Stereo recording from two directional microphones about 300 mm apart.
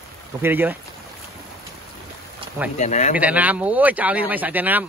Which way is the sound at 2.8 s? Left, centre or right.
Left.